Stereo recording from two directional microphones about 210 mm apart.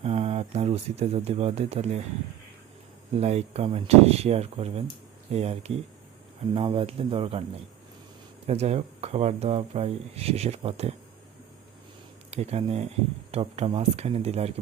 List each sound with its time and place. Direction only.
0.0 s speech: 30° right (ahead or behind)
3.2 s speech: 30° right (ahead or behind)
8.4 s speech: 30° right (ahead or behind)
12.3 s speech: 30° right (ahead or behind)